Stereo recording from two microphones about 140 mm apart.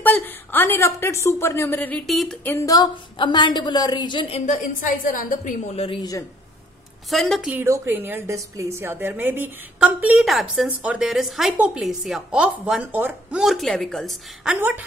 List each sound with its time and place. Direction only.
0.0 s a woman's voice: 15° left (ahead or behind)
2.0 s a woman's voice: centre (ahead or behind)
2.4 s a woman's voice: 20° left (ahead or behind)
4.5 s a woman's voice: 75° left (ahead or behind)
5.7 s speech: 45° left (ahead or behind)
7.1 s a woman's voice: centre (ahead or behind)
7.5 s a woman's voice: 20° right (ahead or behind); by 14.6 s centre (ahead or behind)
14.6 s a woman's voice: 10° right (ahead or behind)